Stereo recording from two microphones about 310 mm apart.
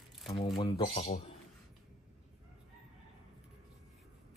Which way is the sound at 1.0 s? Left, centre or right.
Left.